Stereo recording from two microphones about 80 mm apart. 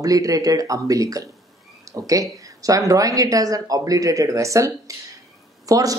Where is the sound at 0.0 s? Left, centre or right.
Right.